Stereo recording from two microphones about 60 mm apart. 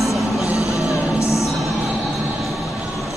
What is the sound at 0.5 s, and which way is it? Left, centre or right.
Music, left.